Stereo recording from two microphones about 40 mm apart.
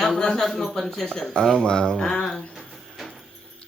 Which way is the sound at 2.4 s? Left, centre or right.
Centre.